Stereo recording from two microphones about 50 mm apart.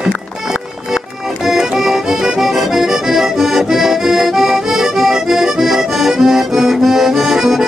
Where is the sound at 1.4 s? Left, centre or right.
Centre.